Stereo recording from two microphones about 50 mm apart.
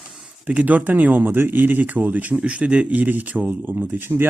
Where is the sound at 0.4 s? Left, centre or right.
Right.